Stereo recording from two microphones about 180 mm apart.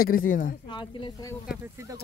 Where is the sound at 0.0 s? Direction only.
50° left (ahead or behind).